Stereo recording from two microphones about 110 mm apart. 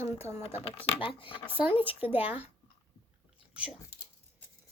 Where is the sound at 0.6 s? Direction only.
55° left (ahead or behind).